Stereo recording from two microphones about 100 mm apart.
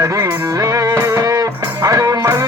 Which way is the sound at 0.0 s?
35° right (ahead or behind).